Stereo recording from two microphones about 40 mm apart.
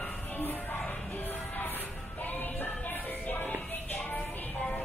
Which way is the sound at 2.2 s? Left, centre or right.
Left.